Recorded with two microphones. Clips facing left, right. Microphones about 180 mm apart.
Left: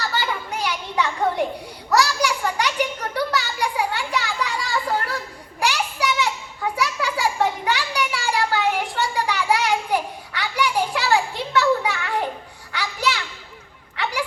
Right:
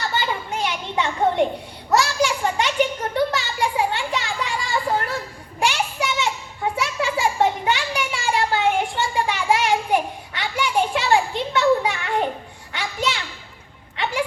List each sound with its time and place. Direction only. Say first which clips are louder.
0.0 s children playing: right 1 dB; 20° right (ahead or behind)
1.9 s a sound: right 1 dB; 25° right (ahead or behind)
5.5 s children playing: right 1 dB; 20° right (ahead or behind)
13.9 s music: right 2 dB; 20° right (ahead or behind)